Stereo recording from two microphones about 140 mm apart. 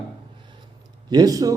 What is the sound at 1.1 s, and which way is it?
Speech, 25° right (ahead or behind).